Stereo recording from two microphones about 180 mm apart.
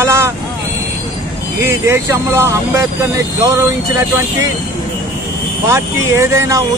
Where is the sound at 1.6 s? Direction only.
15° right (ahead or behind).